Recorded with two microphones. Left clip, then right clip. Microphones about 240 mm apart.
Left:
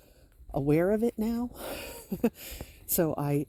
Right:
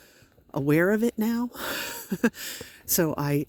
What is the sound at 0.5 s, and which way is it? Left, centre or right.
Speech, right.